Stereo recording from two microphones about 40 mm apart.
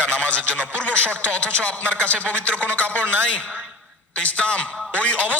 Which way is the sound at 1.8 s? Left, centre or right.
Right.